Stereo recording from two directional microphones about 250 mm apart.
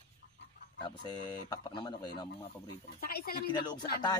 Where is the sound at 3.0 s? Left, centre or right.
Left.